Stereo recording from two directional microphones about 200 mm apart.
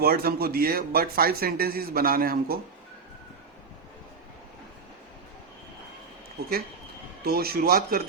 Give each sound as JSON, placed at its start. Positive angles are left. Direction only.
{"t": 0.0, "sound": "speech", "side_deg": -50}
{"t": 7.3, "sound": "speech", "side_deg": -50}